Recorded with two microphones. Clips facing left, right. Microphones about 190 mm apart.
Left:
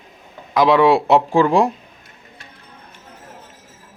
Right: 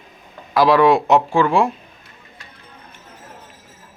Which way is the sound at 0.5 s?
20° left (ahead or behind).